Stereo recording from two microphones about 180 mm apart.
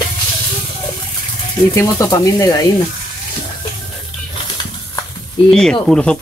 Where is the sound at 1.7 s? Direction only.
15° left (ahead or behind).